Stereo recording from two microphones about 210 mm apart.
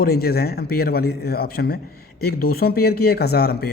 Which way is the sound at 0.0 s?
45° left (ahead or behind).